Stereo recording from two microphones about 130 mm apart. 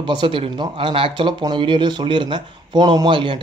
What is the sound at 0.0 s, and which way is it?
Speech, 35° right (ahead or behind).